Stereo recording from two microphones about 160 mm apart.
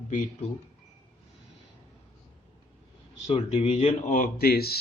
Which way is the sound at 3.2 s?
40° left (ahead or behind).